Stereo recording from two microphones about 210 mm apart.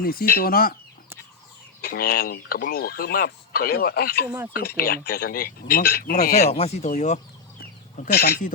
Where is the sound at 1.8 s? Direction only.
45° left (ahead or behind).